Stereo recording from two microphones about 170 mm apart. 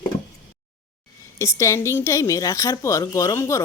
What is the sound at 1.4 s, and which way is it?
A woman's voice, 20° left (ahead or behind).